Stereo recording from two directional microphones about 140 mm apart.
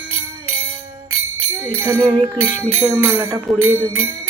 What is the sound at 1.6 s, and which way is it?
Speech, 15° right (ahead or behind).